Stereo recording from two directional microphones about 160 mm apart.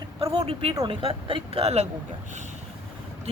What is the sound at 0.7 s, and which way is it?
Speech, 25° right (ahead or behind).